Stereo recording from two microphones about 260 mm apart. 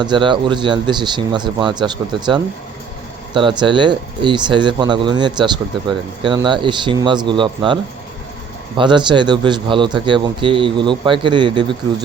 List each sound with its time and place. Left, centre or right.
0.0 s speech: centre
8.8 s speech: centre